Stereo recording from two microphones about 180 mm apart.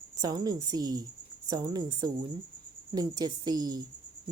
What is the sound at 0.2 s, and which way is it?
A woman's voice, 20° right (ahead or behind).